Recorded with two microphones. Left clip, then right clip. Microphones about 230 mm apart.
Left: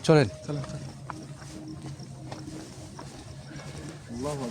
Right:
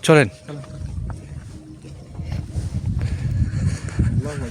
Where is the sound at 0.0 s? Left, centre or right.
Right.